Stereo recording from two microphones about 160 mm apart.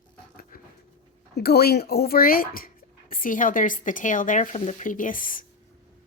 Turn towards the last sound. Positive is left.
turn(degrees=60)  # may be behind; listen again after turning